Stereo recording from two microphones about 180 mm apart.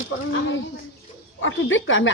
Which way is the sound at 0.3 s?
90° left.